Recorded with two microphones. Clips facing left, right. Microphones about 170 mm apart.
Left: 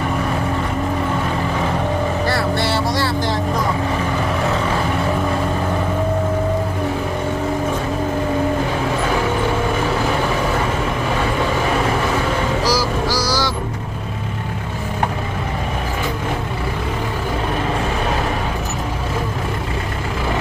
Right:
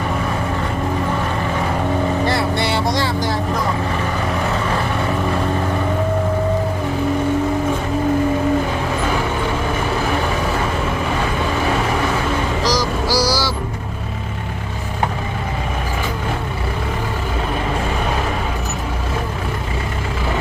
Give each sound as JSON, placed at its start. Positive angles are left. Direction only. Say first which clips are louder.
{"t": 2.2, "sound": "vehicle", "louder": "even", "side_deg": -20}
{"t": 13.1, "sound": "vehicle", "louder": "right 2 dB", "side_deg": -10}